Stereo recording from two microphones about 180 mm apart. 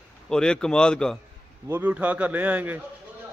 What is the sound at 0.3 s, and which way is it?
Speech, 5° left (ahead or behind).